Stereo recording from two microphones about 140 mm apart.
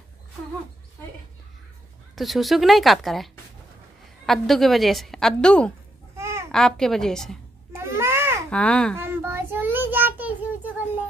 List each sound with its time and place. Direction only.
2.1 s a woman's voice: centre (ahead or behind)
4.3 s a woman's voice: centre (ahead or behind)
6.1 s babbling: 20° right (ahead or behind)
6.5 s a woman's voice: 5° left (ahead or behind)
7.7 s a sound: 15° right (ahead or behind)
8.5 s a child's voice: 10° left (ahead or behind)
8.9 s child singing: 15° right (ahead or behind)